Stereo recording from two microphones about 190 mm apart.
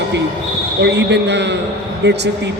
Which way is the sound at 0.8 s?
65° right (ahead or behind).